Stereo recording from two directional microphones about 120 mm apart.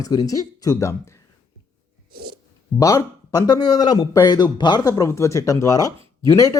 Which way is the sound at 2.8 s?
25° left (ahead or behind).